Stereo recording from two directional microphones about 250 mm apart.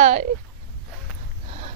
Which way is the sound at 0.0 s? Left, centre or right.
Right.